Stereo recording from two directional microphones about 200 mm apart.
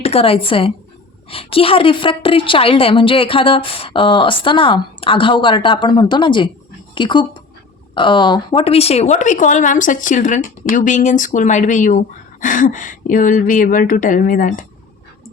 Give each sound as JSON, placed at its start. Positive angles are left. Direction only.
{"t": 0.0, "sound": "a woman's voice", "side_deg": 30}